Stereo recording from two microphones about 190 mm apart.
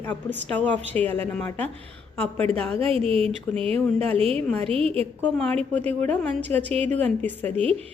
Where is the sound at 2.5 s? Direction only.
30° right (ahead or behind).